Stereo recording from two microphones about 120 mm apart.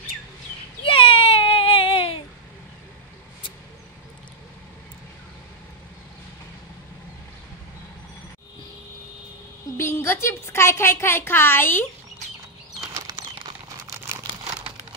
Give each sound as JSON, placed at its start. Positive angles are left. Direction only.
{"t": 0.8, "sound": "baby cry", "side_deg": 50}
{"t": 9.8, "sound": "a woman's voice", "side_deg": 20}
{"t": 12.9, "sound": "clip-clop", "side_deg": -30}